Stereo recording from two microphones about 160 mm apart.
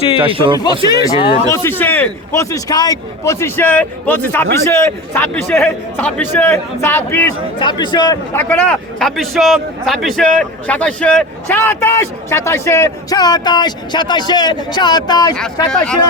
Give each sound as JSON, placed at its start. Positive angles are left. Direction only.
{"t": 0.2, "sound": "speech", "side_deg": -35}
{"t": 0.9, "sound": "a man's voice", "side_deg": 25}
{"t": 7.6, "sound": "a man's voice", "side_deg": 30}
{"t": 15.7, "sound": "speech", "side_deg": 5}